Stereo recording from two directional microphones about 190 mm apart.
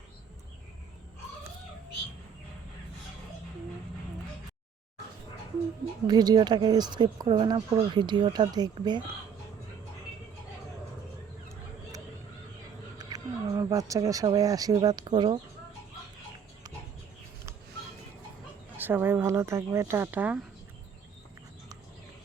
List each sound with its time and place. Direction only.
6.1 s speech: 20° right (ahead or behind)
13.0 s speech: 20° right (ahead or behind)
18.8 s speech: 10° right (ahead or behind)